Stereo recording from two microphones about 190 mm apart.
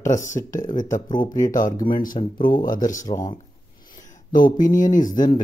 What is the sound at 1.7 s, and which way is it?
Speech, 25° left (ahead or behind).